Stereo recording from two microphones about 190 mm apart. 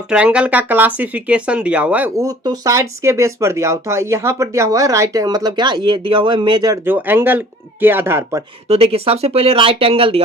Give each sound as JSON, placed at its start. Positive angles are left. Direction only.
{"t": 0.1, "sound": "speech", "side_deg": -5}
{"t": 6.8, "sound": "speech", "side_deg": -10}
{"t": 8.6, "sound": "speech", "side_deg": -30}